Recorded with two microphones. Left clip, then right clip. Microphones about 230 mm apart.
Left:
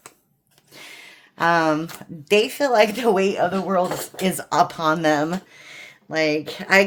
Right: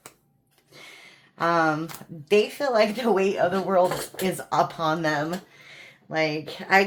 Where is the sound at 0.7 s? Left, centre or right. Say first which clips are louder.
Left 5 dB; left.